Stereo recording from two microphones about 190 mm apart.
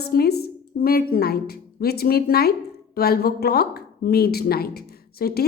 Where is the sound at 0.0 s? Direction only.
55° left (ahead or behind).